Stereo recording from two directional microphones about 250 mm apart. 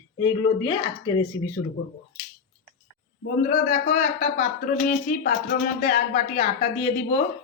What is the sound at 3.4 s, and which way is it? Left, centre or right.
A woman's voice, left.